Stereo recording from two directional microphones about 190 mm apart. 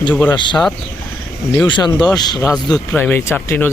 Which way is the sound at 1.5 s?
20° left (ahead or behind).